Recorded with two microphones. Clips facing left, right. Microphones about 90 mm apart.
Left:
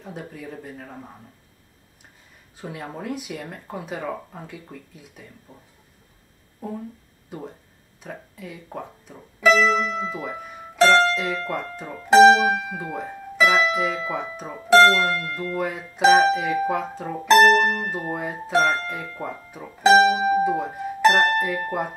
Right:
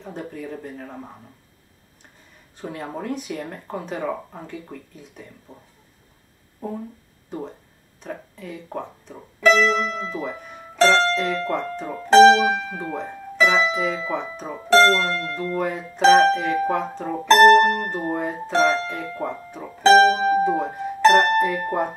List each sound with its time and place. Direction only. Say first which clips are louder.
0.0 s speech: right 3 dB; 5° left (ahead or behind)
2.5 s speech: right 3 dB; 5° left (ahead or behind)
6.6 s speech: right 2 dB; 5° left (ahead or behind)
8.0 s speech: right 3 dB; 5° left (ahead or behind)
17.5 s speech: right 5 dB; 60° right (ahead or behind)
18.1 s speech: even; 5° left (ahead or behind)